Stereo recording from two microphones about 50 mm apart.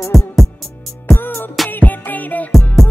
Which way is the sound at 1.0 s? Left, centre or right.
Left.